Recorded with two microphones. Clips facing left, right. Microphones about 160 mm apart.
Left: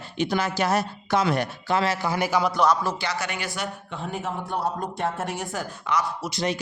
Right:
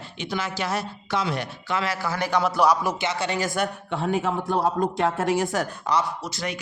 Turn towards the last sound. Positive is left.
turn(degrees=30)  # may be behind; listen again after turning